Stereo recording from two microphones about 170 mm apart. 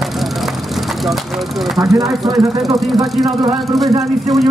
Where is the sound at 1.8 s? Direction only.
20° right (ahead or behind).